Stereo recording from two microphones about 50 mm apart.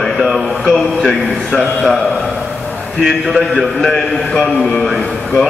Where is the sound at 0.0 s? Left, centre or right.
Centre.